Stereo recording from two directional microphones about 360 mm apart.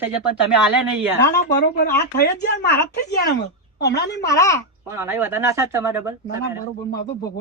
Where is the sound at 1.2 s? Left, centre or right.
Left.